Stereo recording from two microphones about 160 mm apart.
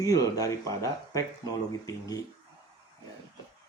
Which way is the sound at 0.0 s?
20° left (ahead or behind).